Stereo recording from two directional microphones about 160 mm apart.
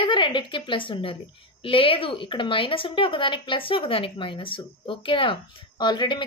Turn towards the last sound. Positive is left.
turn(degrees=30)  # may be behind; listen again after turning